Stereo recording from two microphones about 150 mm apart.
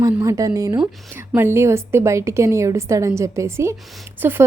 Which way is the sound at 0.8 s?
5° right (ahead or behind).